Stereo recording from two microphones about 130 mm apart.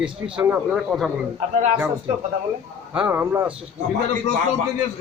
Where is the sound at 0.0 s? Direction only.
10° right (ahead or behind).